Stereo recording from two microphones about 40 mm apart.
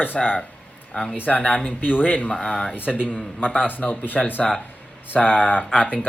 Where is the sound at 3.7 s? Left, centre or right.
Left.